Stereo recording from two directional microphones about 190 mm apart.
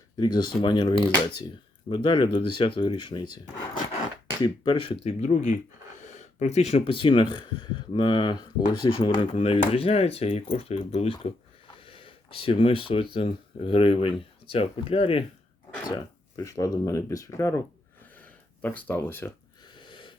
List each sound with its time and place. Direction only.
0.2 s speech: 20° left (ahead or behind)
4.4 s speech: 25° left (ahead or behind)
5.0 s speech: 40° left (ahead or behind)
11.8 s a sound: 30° left (ahead or behind)
13.1 s speech: 30° left (ahead or behind)
16.0 s speech: 20° left (ahead or behind)
18.2 s a sound: 10° left (ahead or behind)
19.8 s wheeze: 25° left (ahead or behind)